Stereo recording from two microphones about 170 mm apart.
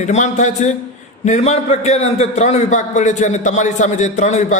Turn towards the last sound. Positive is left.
turn(degrees=45)  # may be behind; listen again after turning